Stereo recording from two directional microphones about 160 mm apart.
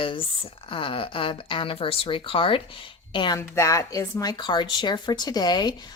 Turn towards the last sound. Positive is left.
turn(degrees=25)  # may be behind; listen again after turning